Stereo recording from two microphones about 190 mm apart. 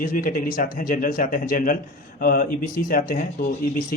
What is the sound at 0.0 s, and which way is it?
A man's voice, 45° left (ahead or behind).